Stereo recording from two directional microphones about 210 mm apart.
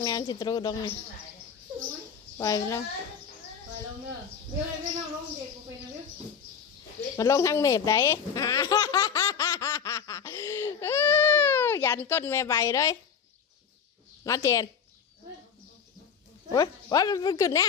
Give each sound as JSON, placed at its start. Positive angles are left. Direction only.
{"t": 0.0, "sound": "speech", "side_deg": 20}
{"t": 2.4, "sound": "speech", "side_deg": 15}
{"t": 7.2, "sound": "baby laughter", "side_deg": 15}
{"t": 10.8, "sound": "baby cry", "side_deg": 10}
{"t": 14.3, "sound": "speech", "side_deg": 15}
{"t": 16.5, "sound": "speech", "side_deg": 20}